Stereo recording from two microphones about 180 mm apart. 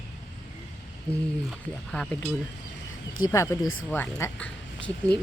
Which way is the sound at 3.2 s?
15° left (ahead or behind).